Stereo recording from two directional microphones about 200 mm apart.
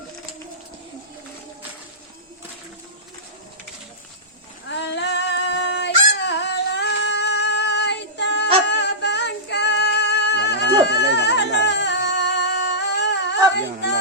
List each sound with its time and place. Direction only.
4.7 s female singing: 60° left (ahead or behind)
10.8 s singing: 60° left (ahead or behind)